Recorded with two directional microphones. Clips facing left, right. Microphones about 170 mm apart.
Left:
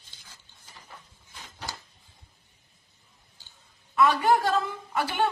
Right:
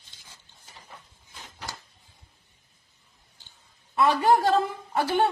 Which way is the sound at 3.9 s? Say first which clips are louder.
Right 1 dB; 30° right (ahead or behind).